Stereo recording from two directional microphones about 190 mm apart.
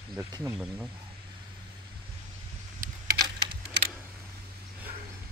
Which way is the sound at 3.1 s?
25° right (ahead or behind).